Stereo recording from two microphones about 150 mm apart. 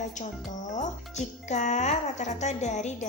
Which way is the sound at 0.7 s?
50° left (ahead or behind).